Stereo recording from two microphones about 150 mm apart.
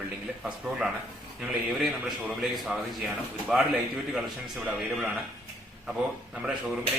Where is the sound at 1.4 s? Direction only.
5° right (ahead or behind).